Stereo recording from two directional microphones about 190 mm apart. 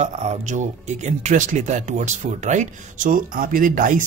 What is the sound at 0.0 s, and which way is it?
Speech, 40° right (ahead or behind).